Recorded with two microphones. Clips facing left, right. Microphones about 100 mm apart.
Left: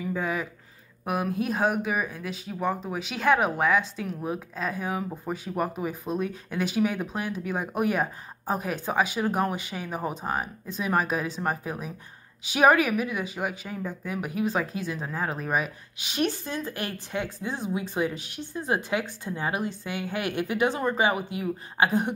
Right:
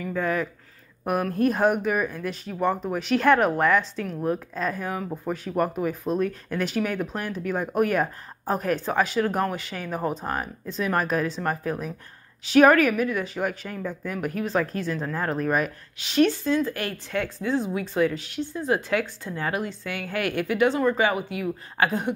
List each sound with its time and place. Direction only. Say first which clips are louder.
0.0 s a woman's voice: right 3 dB; 10° left (ahead or behind)